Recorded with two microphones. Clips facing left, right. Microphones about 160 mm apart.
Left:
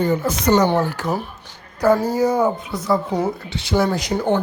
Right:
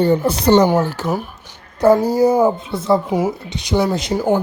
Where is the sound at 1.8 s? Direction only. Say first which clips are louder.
Right 4 dB; 30° right (ahead or behind).